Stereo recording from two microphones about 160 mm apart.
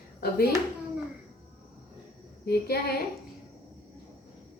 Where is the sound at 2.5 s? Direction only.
75° left (ahead or behind).